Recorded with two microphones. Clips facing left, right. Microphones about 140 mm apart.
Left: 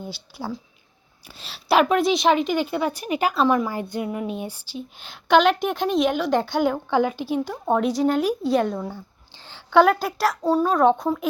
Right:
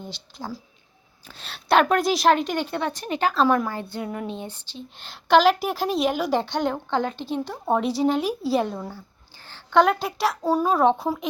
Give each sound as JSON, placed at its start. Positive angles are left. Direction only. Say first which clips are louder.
{"t": 0.0, "sound": "speech", "louder": "left 3 dB", "side_deg": 10}
{"t": 3.7, "sound": "speech", "louder": "left 3 dB", "side_deg": 15}
{"t": 9.3, "sound": "a sound", "louder": "left 2 dB", "side_deg": 20}
{"t": 9.8, "sound": "speech", "louder": "left 2 dB", "side_deg": 0}
{"t": 10.4, "sound": "a child's voice", "louder": "left 2 dB", "side_deg": -10}